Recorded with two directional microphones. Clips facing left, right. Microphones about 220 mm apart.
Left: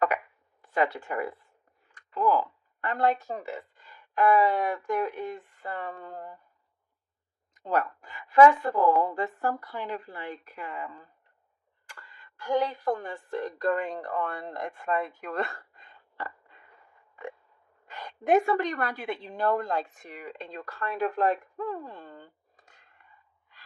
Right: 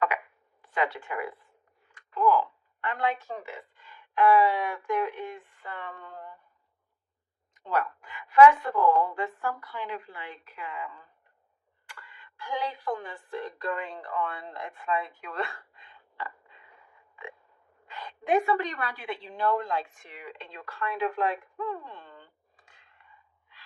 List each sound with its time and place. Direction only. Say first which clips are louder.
0.6 s speech: left 3 dB; 40° left (ahead or behind)
7.6 s a woman's voice: left 2 dB; 40° left (ahead or behind)
17.8 s a woman's voice: left 3 dB; 45° left (ahead or behind)